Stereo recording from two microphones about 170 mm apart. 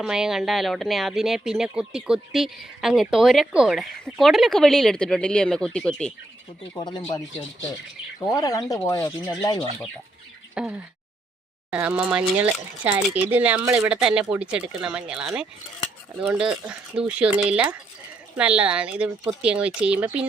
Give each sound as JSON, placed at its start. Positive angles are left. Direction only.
{"t": 0.0, "sound": "speech", "side_deg": -5}
{"t": 6.7, "sound": "speech", "side_deg": 25}
{"t": 10.5, "sound": "speech", "side_deg": -5}